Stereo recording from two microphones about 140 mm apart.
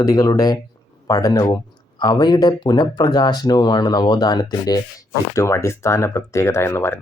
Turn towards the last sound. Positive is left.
turn(degrees=20)  # may be behind; listen again after turning